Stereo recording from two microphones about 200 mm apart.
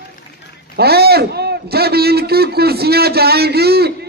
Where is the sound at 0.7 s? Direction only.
50° right (ahead or behind).